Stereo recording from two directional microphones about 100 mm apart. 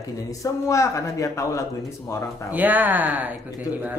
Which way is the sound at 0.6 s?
30° left (ahead or behind).